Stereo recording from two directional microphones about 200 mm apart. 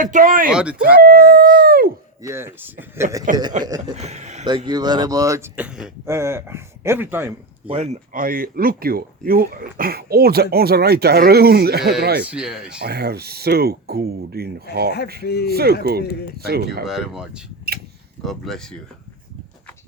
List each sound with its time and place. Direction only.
0.0 s speech: 40° right (ahead or behind)
0.5 s speech: 5° right (ahead or behind)
0.9 s speech: 45° right (ahead or behind)
2.2 s speech: 15° right (ahead or behind)
3.9 s speech: 35° right (ahead or behind)
4.4 s speech: 25° right (ahead or behind)
7.7 s speech: 30° right (ahead or behind); by 12.2 s 50° right (ahead or behind)
12.2 s speech: 5° right (ahead or behind)
12.8 s speech: 50° right (ahead or behind)
15.2 s speech: 55° left (ahead or behind)
15.4 s speech: 50° right (ahead or behind)
16.8 s speech: 5° right (ahead or behind)